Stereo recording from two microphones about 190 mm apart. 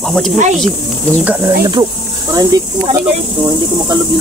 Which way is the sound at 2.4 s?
20° right (ahead or behind).